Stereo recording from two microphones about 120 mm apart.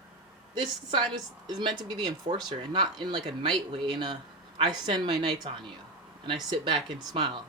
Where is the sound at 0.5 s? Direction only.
45° right (ahead or behind).